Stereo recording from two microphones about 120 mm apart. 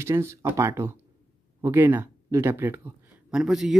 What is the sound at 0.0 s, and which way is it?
Speech, 25° right (ahead or behind).